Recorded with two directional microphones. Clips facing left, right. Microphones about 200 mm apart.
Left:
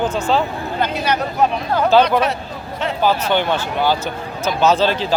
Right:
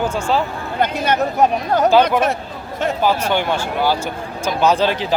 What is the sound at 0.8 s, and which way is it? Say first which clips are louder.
Speech: right 3 dB; 50° right (ahead or behind).